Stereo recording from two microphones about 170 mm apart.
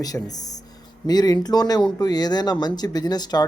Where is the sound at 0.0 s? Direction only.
20° left (ahead or behind).